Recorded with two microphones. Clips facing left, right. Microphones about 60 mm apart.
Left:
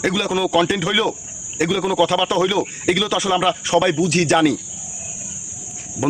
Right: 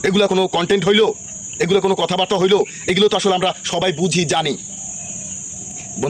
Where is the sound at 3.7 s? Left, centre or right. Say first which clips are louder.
Left 2 dB; left.